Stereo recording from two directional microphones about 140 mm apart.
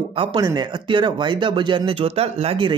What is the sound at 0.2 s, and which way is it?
Speech, 40° right (ahead or behind).